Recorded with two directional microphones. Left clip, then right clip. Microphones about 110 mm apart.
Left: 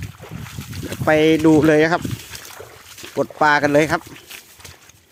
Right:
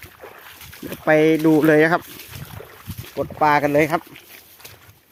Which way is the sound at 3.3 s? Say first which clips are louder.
Left 1 dB; 35° left (ahead or behind).